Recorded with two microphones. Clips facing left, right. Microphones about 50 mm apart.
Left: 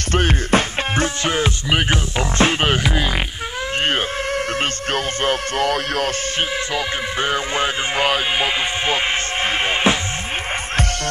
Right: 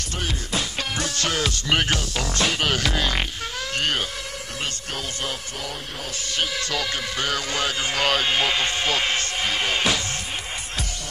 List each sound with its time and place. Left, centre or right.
0.1 s music: left
1.0 s music: left
2.8 s music: centre
4.6 s music: left
6.7 s music: left
9.4 s music: left